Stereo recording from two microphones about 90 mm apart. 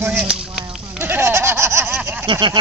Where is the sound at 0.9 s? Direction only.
20° right (ahead or behind).